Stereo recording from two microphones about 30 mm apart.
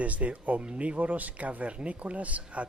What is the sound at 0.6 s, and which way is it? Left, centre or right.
Speech, right.